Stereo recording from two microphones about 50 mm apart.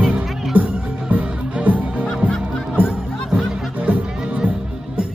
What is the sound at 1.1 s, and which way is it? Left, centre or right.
Music, right.